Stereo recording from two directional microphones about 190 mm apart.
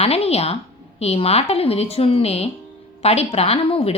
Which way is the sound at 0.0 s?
30° left (ahead or behind).